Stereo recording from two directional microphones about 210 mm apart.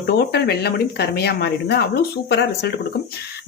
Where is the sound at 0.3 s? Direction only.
50° left (ahead or behind).